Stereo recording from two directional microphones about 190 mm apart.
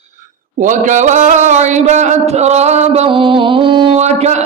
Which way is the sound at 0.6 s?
40° right (ahead or behind).